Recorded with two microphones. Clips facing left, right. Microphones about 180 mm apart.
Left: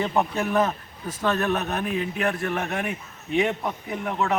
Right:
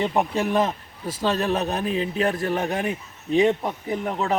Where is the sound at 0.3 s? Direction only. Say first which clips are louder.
Right 1 dB; 30° right (ahead or behind).